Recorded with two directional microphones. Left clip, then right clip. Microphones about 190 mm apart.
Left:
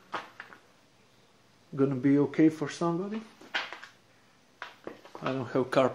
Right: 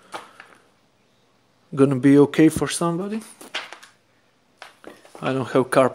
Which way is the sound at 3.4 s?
50° right (ahead or behind).